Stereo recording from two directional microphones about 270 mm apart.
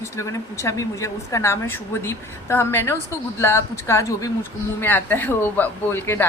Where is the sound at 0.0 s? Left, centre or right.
Centre.